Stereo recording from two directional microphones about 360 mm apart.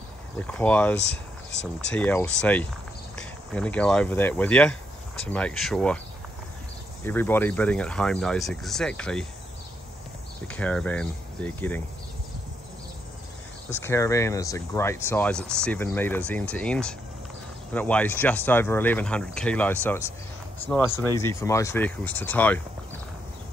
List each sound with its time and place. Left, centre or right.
0.4 s speech: centre
0.9 s speech: left
2.0 s speech: centre
7.1 s speech: centre
10.5 s speech: centre
13.7 s speech: centre